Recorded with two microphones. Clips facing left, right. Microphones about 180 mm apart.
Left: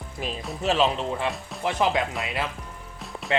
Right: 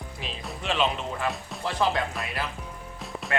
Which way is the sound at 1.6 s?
20° left (ahead or behind).